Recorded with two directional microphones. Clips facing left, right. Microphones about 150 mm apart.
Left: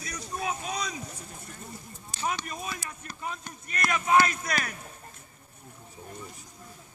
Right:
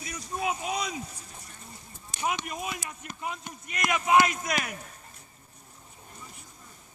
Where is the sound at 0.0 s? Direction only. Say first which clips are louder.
Right 2 dB; 20° right (ahead or behind).